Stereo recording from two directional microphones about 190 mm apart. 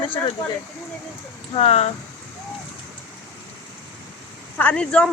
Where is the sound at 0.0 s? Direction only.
25° left (ahead or behind).